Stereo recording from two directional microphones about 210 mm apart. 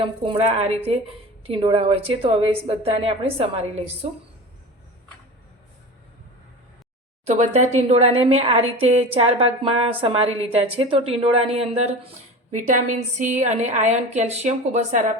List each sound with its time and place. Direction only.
0.0 s a woman's voice: 25° right (ahead or behind)
7.3 s a woman's voice: 30° right (ahead or behind)